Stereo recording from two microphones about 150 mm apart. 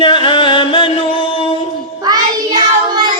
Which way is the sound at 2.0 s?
30° right (ahead or behind).